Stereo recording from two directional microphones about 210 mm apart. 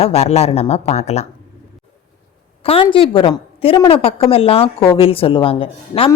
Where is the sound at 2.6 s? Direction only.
25° left (ahead or behind).